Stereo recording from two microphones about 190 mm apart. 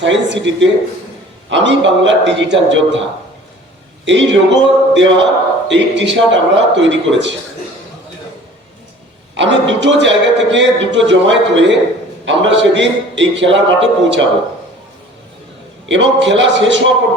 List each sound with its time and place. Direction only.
0.0 s a man's voice: 70° right (ahead or behind)
4.0 s a man's voice: 75° right (ahead or behind)
9.3 s a man's voice: 75° right (ahead or behind)
15.9 s a man's voice: 70° right (ahead or behind)